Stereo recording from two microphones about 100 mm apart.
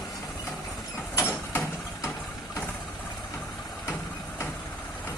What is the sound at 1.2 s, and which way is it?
Vehicle, 20° left (ahead or behind).